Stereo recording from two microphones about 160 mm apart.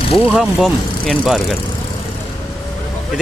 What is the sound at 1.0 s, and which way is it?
Speech, 5° left (ahead or behind).